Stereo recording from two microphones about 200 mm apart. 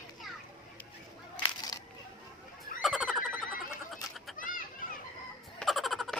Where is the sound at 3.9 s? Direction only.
Centre (ahead or behind).